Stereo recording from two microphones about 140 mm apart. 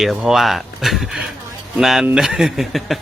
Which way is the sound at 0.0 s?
Centre (ahead or behind).